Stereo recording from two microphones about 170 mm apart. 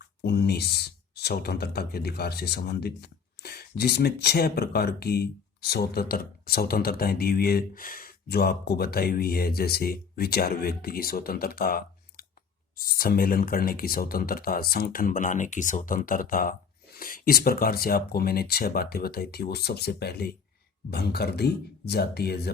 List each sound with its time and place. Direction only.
0.2 s speech: 70° left (ahead or behind)